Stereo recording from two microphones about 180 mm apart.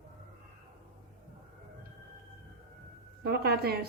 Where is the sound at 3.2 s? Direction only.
60° right (ahead or behind).